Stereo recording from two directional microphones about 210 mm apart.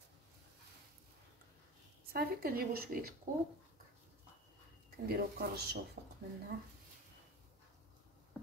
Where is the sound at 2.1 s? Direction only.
45° right (ahead or behind).